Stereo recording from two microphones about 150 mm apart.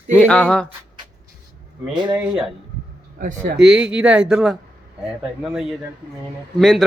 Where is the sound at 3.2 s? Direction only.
65° right (ahead or behind).